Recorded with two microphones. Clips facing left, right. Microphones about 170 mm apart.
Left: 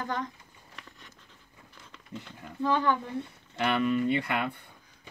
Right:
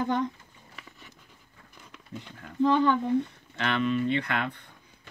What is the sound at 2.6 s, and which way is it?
Speech, 20° right (ahead or behind).